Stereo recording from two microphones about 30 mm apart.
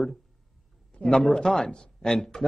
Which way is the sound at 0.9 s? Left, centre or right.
Left.